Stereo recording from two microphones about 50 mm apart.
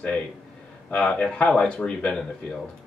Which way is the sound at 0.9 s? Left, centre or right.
Left.